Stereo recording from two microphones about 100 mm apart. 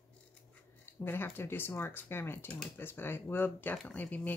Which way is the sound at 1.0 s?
20° left (ahead or behind).